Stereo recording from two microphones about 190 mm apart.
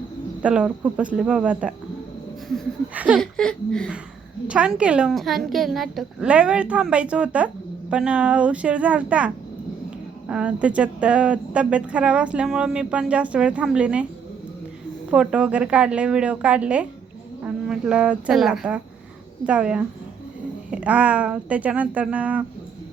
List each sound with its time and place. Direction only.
0.4 s a woman's voice: 5° right (ahead or behind)
15.1 s a woman's voice: 5° right (ahead or behind)